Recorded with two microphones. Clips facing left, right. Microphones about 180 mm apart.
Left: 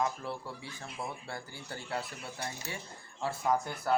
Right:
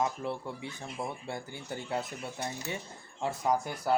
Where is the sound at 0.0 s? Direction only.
20° right (ahead or behind).